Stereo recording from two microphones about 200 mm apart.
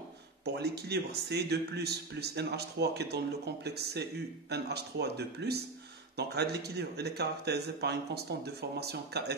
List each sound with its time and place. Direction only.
0.6 s speech: 55° right (ahead or behind)